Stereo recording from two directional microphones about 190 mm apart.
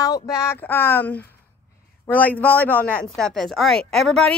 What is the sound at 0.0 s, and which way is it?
A man's voice, 15° left (ahead or behind).